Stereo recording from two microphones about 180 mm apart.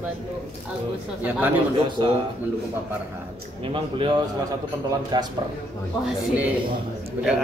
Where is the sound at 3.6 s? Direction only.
30° right (ahead or behind).